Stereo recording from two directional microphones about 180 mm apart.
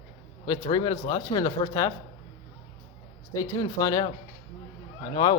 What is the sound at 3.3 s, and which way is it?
Speech, 20° left (ahead or behind).